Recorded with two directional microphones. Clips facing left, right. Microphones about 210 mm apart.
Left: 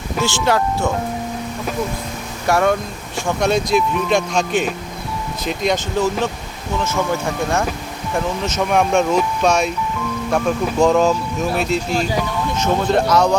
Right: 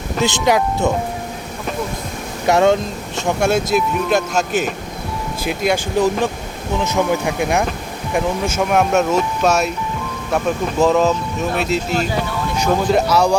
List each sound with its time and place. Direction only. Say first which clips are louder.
0.2 s speech: right 2 dB; 20° right (ahead or behind)
2.5 s speech: right 3 dB; 25° right (ahead or behind)
3.4 s speech: even; 5° right (ahead or behind)